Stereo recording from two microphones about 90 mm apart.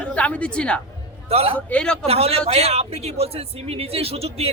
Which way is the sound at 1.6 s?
15° left (ahead or behind).